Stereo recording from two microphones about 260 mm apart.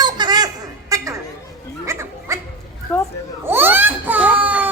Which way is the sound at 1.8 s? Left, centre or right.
Centre.